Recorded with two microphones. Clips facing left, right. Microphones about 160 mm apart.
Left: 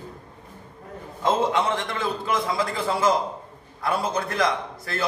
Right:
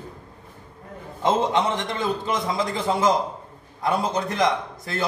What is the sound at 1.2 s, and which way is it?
A man's voice, 20° right (ahead or behind).